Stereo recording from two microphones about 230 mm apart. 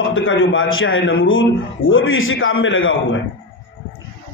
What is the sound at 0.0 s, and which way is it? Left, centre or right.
A man's voice, left.